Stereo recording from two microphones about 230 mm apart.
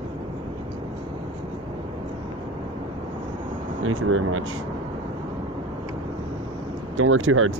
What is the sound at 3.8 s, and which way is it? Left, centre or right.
Speech, right.